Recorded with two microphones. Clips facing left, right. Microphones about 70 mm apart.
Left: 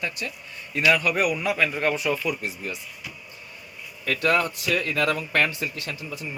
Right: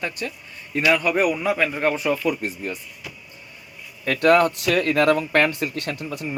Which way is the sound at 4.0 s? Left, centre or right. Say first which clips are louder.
Right 6 dB; right.